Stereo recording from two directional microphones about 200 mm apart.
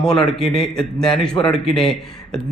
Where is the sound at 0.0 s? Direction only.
5° left (ahead or behind).